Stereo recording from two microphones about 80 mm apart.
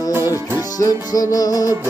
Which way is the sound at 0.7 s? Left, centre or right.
Left.